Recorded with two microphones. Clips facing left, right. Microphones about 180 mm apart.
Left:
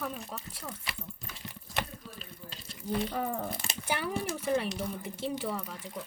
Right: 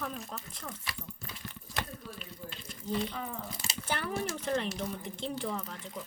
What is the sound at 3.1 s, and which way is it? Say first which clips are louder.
Speech: left 6 dB; 50° left (ahead or behind).